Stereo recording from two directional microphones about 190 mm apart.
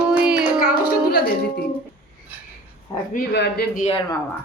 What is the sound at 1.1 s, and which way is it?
Speech, 55° left (ahead or behind).